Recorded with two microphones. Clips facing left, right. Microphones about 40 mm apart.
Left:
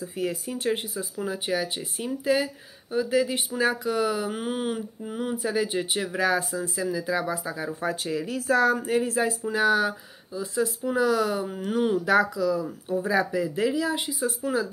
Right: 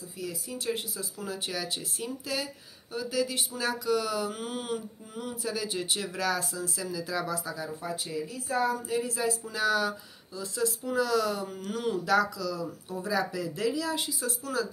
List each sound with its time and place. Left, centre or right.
0.0 s speech: left
7.8 s speech: left
8.7 s speech: left